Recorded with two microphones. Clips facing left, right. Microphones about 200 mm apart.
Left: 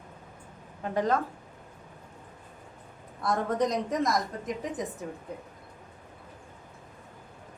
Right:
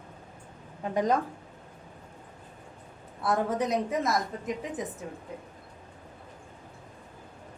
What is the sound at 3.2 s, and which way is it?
A woman's voice, 5° right (ahead or behind).